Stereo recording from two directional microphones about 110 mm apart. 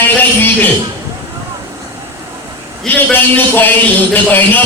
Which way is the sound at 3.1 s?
20° left (ahead or behind).